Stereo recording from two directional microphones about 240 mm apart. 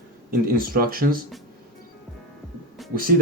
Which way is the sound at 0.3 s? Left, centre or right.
Right.